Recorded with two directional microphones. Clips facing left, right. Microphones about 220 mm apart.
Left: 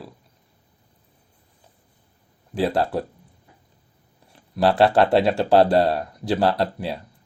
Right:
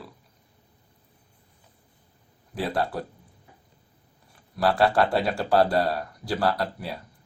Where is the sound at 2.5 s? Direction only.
25° left (ahead or behind).